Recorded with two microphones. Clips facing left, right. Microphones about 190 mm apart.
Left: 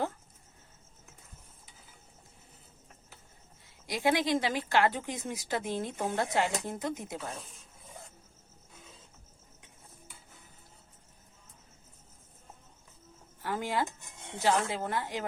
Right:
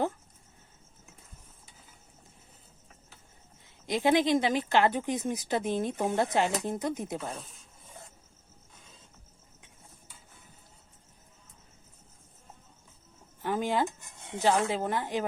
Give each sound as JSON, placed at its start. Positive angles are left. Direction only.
{"t": 3.8, "sound": "speech", "side_deg": -20}
{"t": 7.4, "sound": "filing", "side_deg": 0}
{"t": 13.4, "sound": "a sound", "side_deg": -20}
{"t": 14.3, "sound": "speech", "side_deg": -15}